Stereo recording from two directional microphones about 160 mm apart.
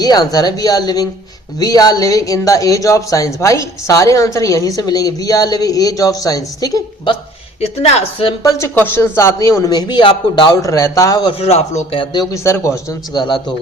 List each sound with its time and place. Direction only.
0.0 s speech: 25° left (ahead or behind)
7.6 s a woman's voice: 40° left (ahead or behind)
8.4 s speech: 20° left (ahead or behind); by 12.2 s 35° left (ahead or behind)
12.3 s speech: 15° left (ahead or behind)